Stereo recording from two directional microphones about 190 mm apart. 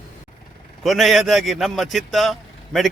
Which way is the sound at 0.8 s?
Centre (ahead or behind).